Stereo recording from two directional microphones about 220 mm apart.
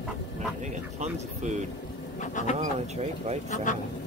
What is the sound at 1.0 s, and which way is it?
Speech, 35° right (ahead or behind).